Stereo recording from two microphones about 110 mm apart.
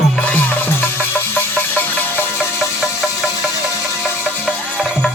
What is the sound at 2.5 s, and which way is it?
Music, 5° right (ahead or behind).